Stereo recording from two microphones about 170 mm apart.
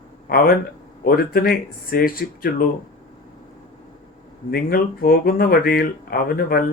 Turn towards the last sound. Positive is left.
turn(degrees=60)  # may be behind; listen again after turning